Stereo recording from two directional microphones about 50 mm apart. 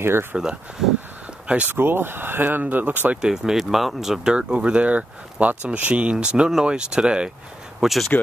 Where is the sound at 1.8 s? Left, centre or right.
Right.